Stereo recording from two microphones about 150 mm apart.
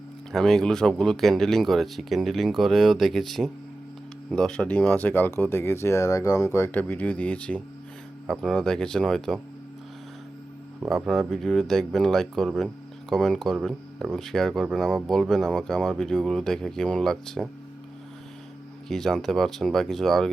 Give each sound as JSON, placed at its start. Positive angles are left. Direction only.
{"t": 0.3, "sound": "speech", "side_deg": 5}
{"t": 10.8, "sound": "speech", "side_deg": 0}
{"t": 18.9, "sound": "speech", "side_deg": 0}